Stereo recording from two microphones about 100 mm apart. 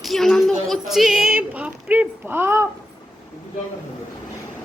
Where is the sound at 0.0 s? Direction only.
Centre (ahead or behind).